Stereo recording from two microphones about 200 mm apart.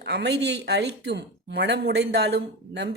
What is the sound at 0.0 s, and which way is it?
Speech, 60° right (ahead or behind).